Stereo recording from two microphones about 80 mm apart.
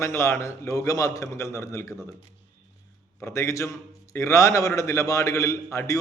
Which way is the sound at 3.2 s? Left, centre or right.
Left.